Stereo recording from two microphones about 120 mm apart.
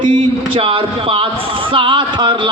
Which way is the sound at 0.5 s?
50° right (ahead or behind).